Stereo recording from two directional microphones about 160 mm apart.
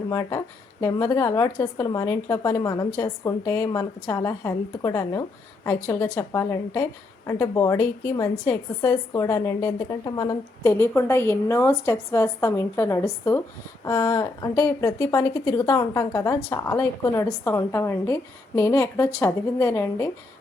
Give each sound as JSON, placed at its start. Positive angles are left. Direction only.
{"t": 0.1, "sound": "a woman's voice", "side_deg": 20}